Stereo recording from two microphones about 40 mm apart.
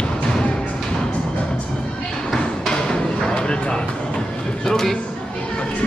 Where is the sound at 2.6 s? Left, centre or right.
Left.